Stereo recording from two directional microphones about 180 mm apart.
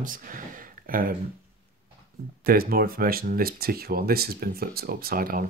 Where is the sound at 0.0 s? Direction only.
50° right (ahead or behind).